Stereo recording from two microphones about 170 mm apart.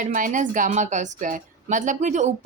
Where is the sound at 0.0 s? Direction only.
50° right (ahead or behind).